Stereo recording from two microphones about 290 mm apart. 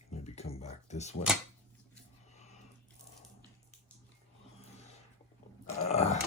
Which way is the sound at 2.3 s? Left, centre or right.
Left.